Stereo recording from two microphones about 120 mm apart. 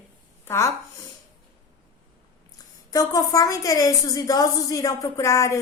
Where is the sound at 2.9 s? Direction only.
30° left (ahead or behind).